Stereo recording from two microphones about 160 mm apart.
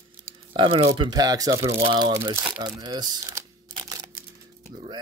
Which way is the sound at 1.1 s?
25° right (ahead or behind).